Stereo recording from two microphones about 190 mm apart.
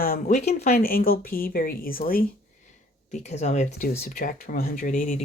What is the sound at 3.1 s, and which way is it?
Speech, 35° left (ahead or behind).